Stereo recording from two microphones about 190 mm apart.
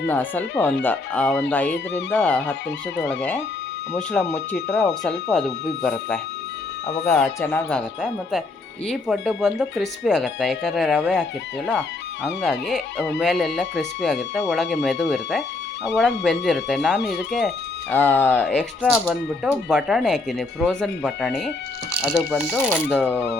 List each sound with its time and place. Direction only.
0.1 s speech: 10° left (ahead or behind)
1.9 s speech: 65° left (ahead or behind)
2.1 s speech: 10° left (ahead or behind)
6.8 s speech: 10° left (ahead or behind)
17.9 s speech: 10° left (ahead or behind)